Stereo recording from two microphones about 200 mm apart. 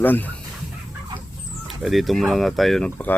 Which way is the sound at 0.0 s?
10° left (ahead or behind).